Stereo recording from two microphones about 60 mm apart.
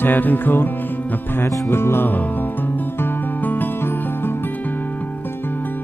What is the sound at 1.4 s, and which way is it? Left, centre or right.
Music, left.